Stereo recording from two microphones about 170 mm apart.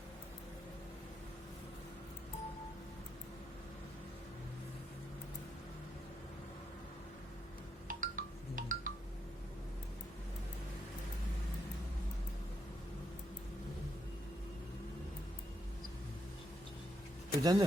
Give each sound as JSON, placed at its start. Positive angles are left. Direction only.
{"t": 7.9, "sound": "wind chime", "side_deg": -50}
{"t": 17.4, "sound": "speech", "side_deg": -20}